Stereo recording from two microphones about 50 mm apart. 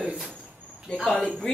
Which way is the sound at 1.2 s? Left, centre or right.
Centre.